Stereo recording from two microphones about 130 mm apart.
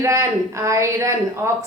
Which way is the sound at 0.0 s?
25° right (ahead or behind).